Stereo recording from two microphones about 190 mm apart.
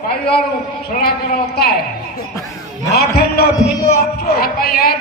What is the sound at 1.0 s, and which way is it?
Speech, 55° left (ahead or behind).